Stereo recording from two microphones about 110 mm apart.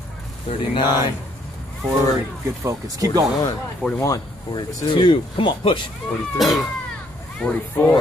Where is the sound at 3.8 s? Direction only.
10° left (ahead or behind).